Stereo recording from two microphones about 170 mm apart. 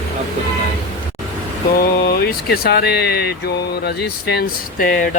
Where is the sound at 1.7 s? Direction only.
60° left (ahead or behind).